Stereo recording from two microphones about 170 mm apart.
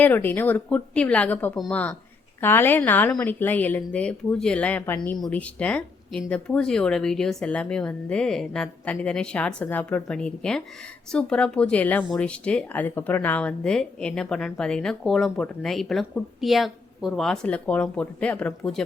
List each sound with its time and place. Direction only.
0.0 s a woman's voice: 10° left (ahead or behind)